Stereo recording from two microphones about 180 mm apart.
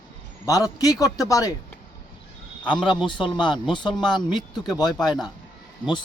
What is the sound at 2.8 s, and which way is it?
A man's voice, 25° left (ahead or behind).